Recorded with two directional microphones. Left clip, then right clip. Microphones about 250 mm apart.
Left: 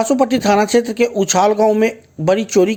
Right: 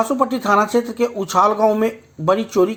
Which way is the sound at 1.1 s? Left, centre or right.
Left.